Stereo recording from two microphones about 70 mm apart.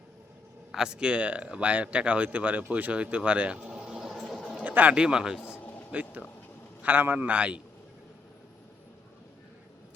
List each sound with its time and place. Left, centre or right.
0.7 s speech: centre
3.8 s a sound: centre
4.6 s speech: right